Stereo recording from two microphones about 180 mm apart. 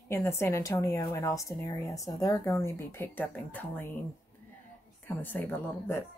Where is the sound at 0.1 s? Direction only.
15° left (ahead or behind).